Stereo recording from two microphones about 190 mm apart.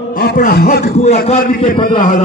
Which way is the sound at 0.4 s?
45° left (ahead or behind).